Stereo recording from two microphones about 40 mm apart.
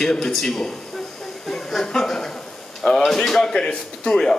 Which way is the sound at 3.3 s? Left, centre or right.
Centre.